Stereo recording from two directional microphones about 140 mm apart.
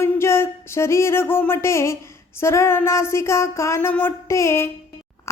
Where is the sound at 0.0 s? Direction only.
20° left (ahead or behind).